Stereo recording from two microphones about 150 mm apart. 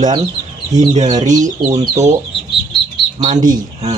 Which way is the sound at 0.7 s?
50° right (ahead or behind).